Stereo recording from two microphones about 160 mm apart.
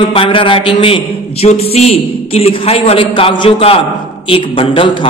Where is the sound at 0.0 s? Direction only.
35° left (ahead or behind).